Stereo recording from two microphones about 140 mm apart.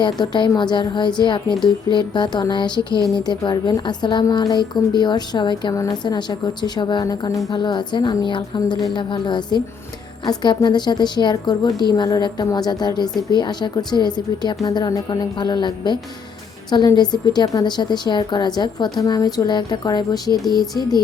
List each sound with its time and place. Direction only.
0.0 s a woman's voice: 30° left (ahead or behind)